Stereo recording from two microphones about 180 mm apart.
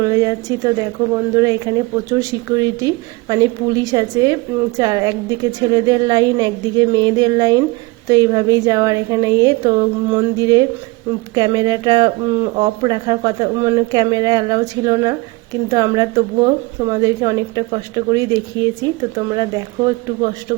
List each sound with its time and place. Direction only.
0.0 s a woman's voice: 20° right (ahead or behind)